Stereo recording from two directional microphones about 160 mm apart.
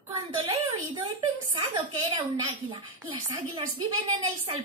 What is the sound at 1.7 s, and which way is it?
A woman's voice, 30° right (ahead or behind).